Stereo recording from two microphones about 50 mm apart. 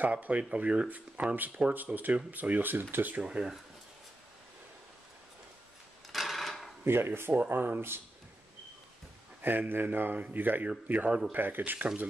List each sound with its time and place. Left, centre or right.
0.0 s speech: right
3.2 s speech: right
6.0 s sewing machine: centre
6.8 s speech: right
7.3 s speech: right
9.4 s speech: right